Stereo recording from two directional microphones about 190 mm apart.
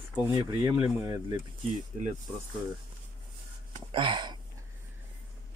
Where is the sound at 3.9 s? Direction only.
25° right (ahead or behind).